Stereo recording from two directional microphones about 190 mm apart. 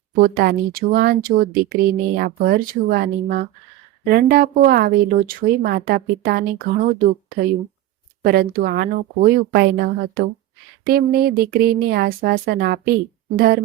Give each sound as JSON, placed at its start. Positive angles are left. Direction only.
{"t": 0.2, "sound": "speech", "side_deg": -55}
{"t": 8.2, "sound": "speech", "side_deg": -50}